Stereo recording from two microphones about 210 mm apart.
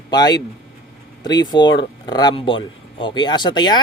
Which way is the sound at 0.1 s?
20° left (ahead or behind).